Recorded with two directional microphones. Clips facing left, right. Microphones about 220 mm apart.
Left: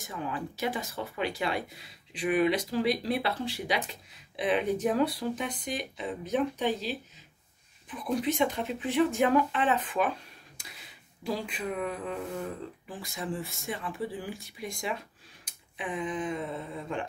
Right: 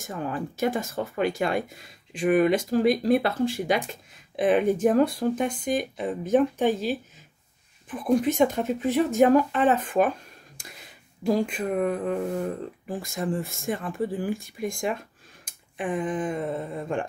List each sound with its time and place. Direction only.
0.0 s speech: 45° right (ahead or behind)
11.2 s speech: 45° right (ahead or behind)